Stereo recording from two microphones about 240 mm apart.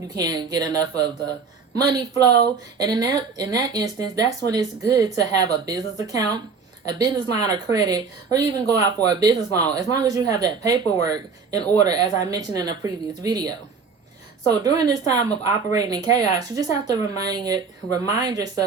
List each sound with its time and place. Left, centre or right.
0.2 s speech: centre